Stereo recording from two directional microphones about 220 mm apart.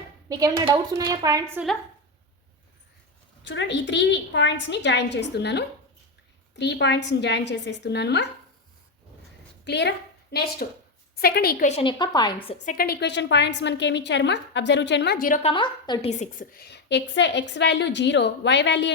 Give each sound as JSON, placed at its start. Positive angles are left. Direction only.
{"t": 0.3, "sound": "a woman's voice", "side_deg": -15}
{"t": 3.4, "sound": "a woman's voice", "side_deg": 55}
{"t": 9.6, "sound": "a woman's voice", "side_deg": 50}
{"t": 10.6, "sound": "a woman's voice", "side_deg": 40}
{"t": 11.7, "sound": "a woman's voice", "side_deg": 25}
{"t": 12.6, "sound": "a woman's voice", "side_deg": 45}